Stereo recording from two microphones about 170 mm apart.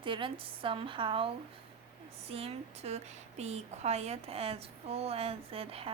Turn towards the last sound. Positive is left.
turn(degrees=-35)  # may be behind; listen again after turning